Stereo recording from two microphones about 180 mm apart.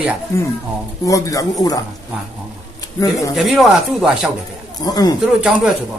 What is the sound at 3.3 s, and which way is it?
Speech, centre (ahead or behind).